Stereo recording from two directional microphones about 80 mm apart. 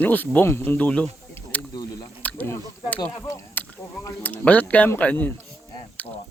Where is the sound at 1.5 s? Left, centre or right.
Centre.